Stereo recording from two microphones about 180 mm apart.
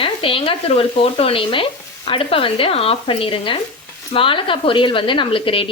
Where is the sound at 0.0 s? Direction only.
30° left (ahead or behind).